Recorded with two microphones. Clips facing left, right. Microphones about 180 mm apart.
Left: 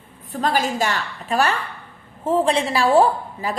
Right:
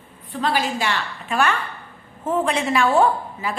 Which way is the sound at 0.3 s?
45° left (ahead or behind).